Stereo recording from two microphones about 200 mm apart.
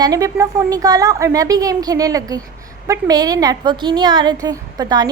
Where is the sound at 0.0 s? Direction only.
20° right (ahead or behind).